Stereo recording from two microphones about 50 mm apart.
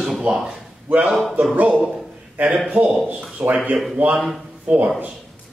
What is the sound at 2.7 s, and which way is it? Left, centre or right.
Speech, right.